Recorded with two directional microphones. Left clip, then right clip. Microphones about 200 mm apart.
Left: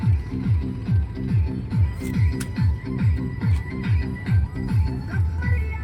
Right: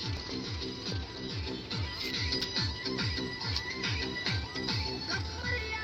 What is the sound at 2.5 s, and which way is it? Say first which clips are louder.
Music: left 1 dB; 40° left (ahead or behind).